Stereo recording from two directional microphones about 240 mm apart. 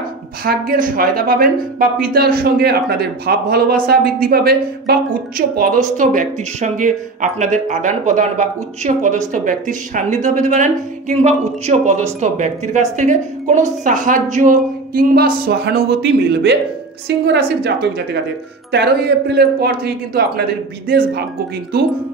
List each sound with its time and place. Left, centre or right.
0.5 s a woman's voice: right